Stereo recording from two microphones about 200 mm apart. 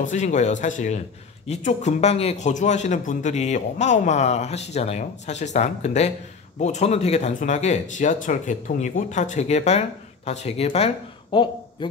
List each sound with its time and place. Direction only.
0.0 s a man's voice: 40° left (ahead or behind)